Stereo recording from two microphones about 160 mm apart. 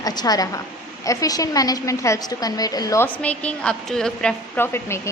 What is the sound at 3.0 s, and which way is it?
A woman's voice, 10° left (ahead or behind).